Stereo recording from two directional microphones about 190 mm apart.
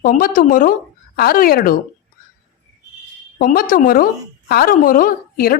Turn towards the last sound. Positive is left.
turn(degrees=50)  # may be behind; listen again after turning